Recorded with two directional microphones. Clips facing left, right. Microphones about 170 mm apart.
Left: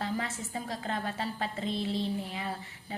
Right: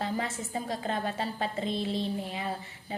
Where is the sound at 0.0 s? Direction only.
25° right (ahead or behind).